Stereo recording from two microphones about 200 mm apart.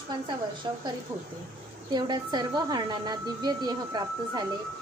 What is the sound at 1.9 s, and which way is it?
A woman's voice, 20° right (ahead or behind).